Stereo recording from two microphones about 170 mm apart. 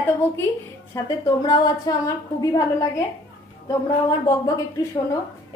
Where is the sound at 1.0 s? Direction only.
20° left (ahead or behind).